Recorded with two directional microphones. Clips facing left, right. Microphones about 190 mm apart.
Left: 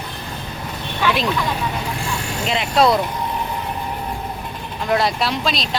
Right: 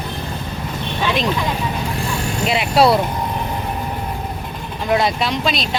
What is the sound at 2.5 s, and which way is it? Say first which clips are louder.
Speech: right 2 dB; 10° right (ahead or behind).